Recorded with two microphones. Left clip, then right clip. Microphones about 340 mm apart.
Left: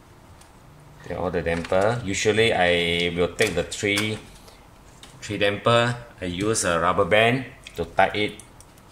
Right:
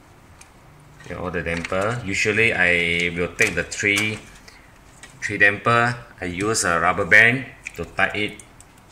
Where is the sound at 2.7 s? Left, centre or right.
Left.